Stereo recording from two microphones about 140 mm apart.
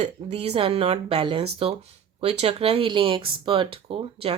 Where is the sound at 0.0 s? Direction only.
45° right (ahead or behind).